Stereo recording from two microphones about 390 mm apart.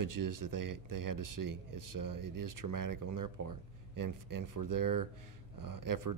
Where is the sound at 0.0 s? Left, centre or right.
Right.